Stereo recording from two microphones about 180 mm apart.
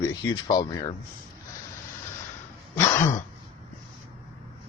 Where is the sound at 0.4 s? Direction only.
20° left (ahead or behind).